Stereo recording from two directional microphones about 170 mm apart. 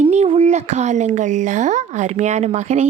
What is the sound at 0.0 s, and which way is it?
A woman's voice, 40° right (ahead or behind).